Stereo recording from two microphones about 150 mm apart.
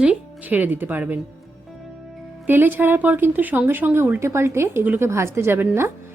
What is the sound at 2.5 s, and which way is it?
Speech, 15° right (ahead or behind).